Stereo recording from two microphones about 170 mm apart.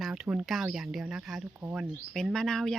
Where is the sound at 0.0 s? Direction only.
5° right (ahead or behind).